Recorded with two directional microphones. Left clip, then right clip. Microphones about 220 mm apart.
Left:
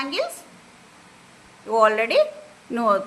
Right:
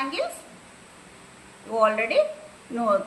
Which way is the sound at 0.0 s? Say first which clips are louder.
Left 2 dB; 50° left (ahead or behind).